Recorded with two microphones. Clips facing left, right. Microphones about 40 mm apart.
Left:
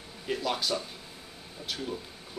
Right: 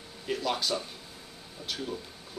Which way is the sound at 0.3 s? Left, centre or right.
Centre.